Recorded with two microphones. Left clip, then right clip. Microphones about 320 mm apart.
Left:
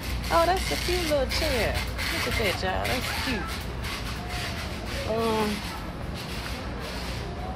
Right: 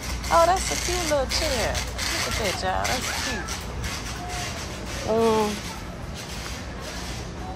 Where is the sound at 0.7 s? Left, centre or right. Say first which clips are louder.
Right 1 dB; right.